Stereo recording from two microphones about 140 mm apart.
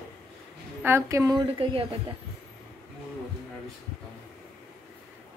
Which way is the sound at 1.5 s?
40° right (ahead or behind).